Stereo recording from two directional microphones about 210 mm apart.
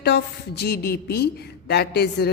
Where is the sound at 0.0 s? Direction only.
50° left (ahead or behind).